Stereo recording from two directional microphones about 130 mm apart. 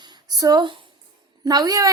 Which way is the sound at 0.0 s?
30° right (ahead or behind).